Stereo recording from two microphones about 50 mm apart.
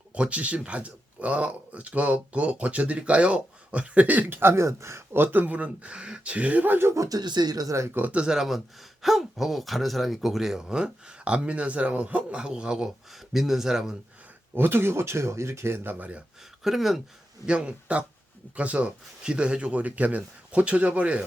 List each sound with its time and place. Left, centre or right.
0.1 s speech: right
4.4 s speech: right
4.6 s speech: right
5.1 s speech: right
8.1 s speech: centre
8.4 s speech: centre
14.5 s speech: right
16.6 s speech: centre
17.4 s speech: centre